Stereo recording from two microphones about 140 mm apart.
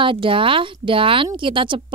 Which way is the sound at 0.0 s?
35° right (ahead or behind).